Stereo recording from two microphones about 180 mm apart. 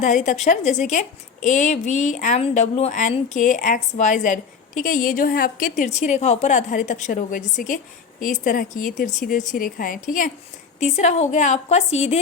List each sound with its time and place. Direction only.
0.0 s a woman's voice: 45° left (ahead or behind)